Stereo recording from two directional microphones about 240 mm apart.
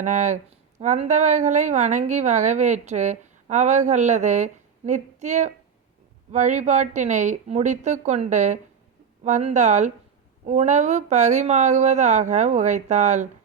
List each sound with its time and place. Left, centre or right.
0.0 s a woman's voice: right